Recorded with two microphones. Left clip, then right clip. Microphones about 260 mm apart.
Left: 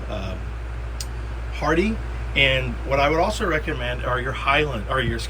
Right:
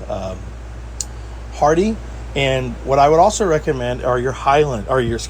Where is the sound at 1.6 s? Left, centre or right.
Centre.